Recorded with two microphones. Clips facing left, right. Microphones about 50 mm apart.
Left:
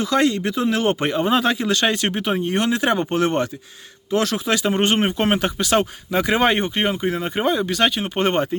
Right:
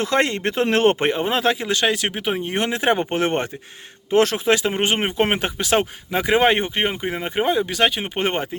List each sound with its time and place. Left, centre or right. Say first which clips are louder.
0.0 s speech: left 1 dB; right
1.0 s speech: even; right
1.3 s speech: left 1 dB; centre; by 4.6 s right
4.6 s speech: left 2 dB; centre